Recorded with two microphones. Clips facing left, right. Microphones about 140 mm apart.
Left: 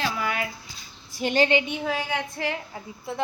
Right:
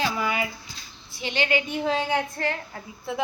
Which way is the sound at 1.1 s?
40° left (ahead or behind).